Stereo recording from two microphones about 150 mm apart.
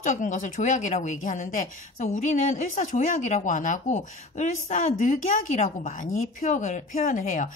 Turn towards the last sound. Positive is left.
turn(degrees=55)  # may be behind; listen again after turning